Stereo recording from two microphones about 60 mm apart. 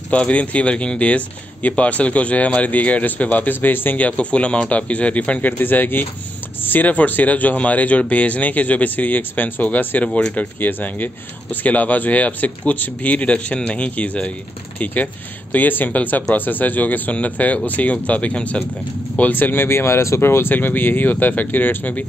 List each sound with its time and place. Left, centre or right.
0.1 s speech: left
5.6 s speech: left
15.5 s speech: left